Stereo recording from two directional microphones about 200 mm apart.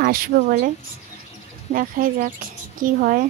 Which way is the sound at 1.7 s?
45° right (ahead or behind).